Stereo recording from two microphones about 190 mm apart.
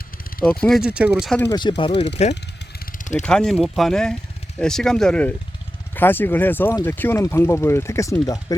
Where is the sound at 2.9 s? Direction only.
40° left (ahead or behind).